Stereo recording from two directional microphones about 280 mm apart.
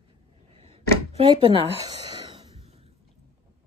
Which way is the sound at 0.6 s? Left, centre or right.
Right.